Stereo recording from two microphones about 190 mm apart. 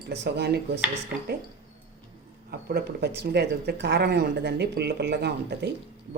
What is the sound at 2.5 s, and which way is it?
Speech, 55° right (ahead or behind).